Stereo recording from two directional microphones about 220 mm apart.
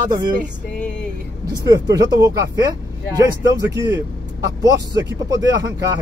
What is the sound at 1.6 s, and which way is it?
Speech, 15° right (ahead or behind).